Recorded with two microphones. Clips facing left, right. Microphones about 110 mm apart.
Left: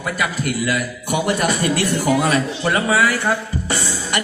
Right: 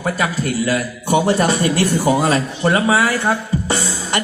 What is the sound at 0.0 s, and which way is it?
A man's voice, 35° right (ahead or behind).